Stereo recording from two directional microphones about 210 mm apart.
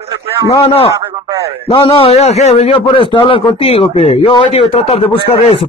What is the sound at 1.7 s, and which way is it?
A man's voice, 25° left (ahead or behind).